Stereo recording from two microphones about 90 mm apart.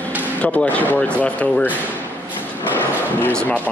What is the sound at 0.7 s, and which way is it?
Speech, 15° left (ahead or behind).